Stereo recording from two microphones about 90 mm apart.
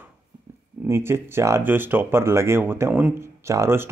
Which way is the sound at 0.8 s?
30° right (ahead or behind).